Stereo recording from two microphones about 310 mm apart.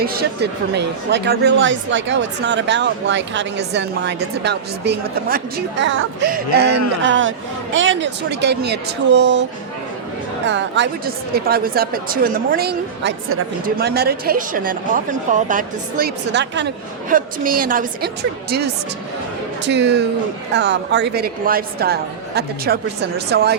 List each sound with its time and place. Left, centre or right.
0.0 s a woman's voice: right